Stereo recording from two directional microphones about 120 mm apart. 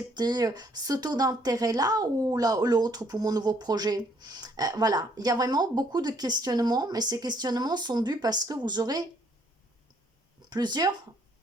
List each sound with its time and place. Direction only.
0.1 s speech: 35° right (ahead or behind)
10.5 s speech: 35° right (ahead or behind)